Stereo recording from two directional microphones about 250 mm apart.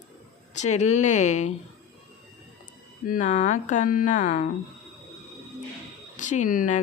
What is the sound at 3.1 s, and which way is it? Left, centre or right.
Speech, left.